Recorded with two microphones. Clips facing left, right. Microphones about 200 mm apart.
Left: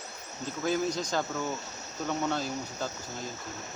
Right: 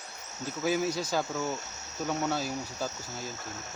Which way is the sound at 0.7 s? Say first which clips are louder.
Right 1 dB; 10° right (ahead or behind).